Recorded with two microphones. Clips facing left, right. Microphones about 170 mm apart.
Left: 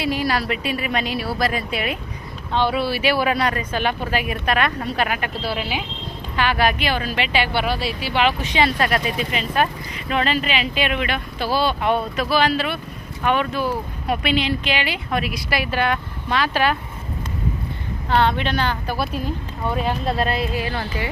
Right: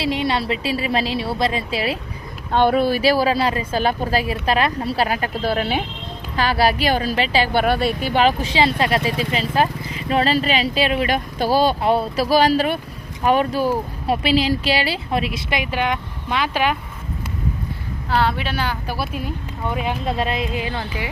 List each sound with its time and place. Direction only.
0.0 s speech: 25° right (ahead or behind)
2.5 s a woman's voice: 50° right (ahead or behind); by 5.3 s 35° right (ahead or behind)
5.4 s speech: 50° right (ahead or behind)
6.3 s a woman's voice: 35° right (ahead or behind); by 16.7 s 15° right (ahead or behind)
18.1 s speech: 5° right (ahead or behind)